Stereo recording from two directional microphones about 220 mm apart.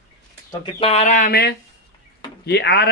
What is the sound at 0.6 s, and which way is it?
Speech, 25° left (ahead or behind).